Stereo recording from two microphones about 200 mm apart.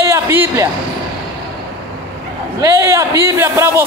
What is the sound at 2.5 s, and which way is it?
A man's voice, 15° right (ahead or behind).